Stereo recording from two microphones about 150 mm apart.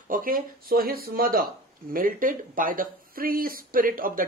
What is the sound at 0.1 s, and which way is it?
Speech, 70° right (ahead or behind).